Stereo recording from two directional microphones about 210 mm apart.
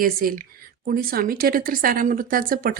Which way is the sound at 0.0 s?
45° right (ahead or behind).